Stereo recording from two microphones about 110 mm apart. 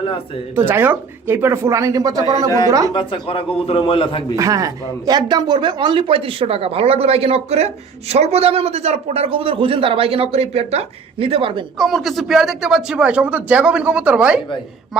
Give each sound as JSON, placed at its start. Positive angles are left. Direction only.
{"t": 0.5, "sound": "speech", "side_deg": -20}
{"t": 2.9, "sound": "a man's voice", "side_deg": 50}
{"t": 4.4, "sound": "speech", "side_deg": -30}
{"t": 11.8, "sound": "speech", "side_deg": 0}